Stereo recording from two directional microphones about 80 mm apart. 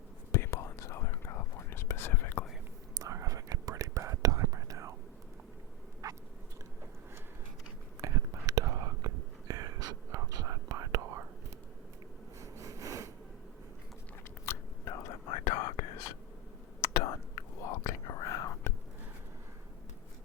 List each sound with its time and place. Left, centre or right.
0.3 s whispering: left
2.9 s whispering: right
6.0 s rodents: right
8.0 s whispering: right
12.4 s a sound: right
14.4 s chewing: left
15.4 s whispering: left